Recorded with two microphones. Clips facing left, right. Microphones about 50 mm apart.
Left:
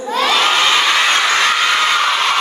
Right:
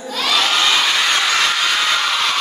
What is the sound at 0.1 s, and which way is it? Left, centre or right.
Crowd, left.